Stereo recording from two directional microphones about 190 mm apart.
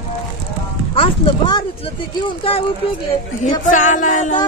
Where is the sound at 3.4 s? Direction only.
40° left (ahead or behind).